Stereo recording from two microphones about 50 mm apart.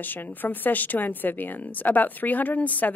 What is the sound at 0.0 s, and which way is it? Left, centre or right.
Speech, left.